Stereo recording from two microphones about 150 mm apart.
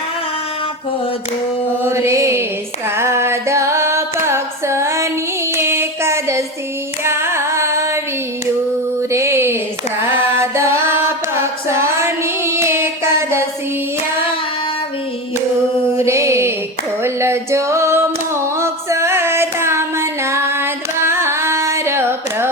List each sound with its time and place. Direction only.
1.8 s mantra: 20° right (ahead or behind)
2.9 s carnatic music: 15° right (ahead or behind)
5.5 s child singing: 15° right (ahead or behind)
7.0 s carnatic music: 15° right (ahead or behind)
9.0 s music: 20° right (ahead or behind)
16.0 s music: 20° right (ahead or behind)
17.0 s singing: 15° right (ahead or behind)